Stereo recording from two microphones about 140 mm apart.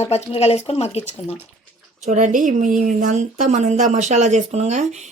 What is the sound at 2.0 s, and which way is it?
A woman's voice, 60° right (ahead or behind).